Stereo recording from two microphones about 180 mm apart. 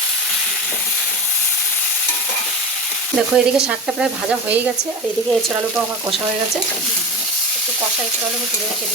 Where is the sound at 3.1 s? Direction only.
5° right (ahead or behind).